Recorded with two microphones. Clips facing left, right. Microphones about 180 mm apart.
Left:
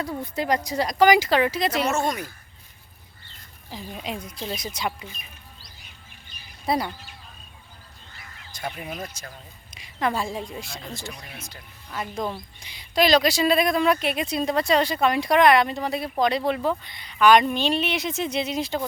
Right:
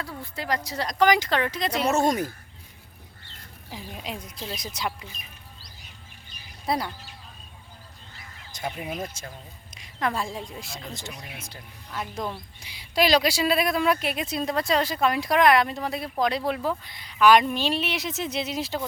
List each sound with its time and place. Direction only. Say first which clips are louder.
0.0 s speech: left 7 dB; 20° left (ahead or behind)
2.0 s speech: right 4 dB; 45° right (ahead or behind)
3.9 s speech: left 4 dB; centre (ahead or behind)
6.7 s speech: left 3 dB; centre (ahead or behind)
8.5 s speech: right 1 dB; 10° right (ahead or behind)
9.0 s speech: right 2 dB; 25° right (ahead or behind)
9.7 s speech: left 2 dB; centre (ahead or behind)
11.3 s speech: even; 30° right (ahead or behind)
11.9 s speech: left 3 dB; centre (ahead or behind)